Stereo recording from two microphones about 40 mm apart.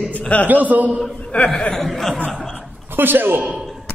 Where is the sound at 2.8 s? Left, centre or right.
Right.